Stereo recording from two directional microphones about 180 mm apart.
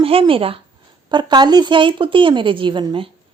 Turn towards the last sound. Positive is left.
turn(degrees=-25)  # may be behind; listen again after turning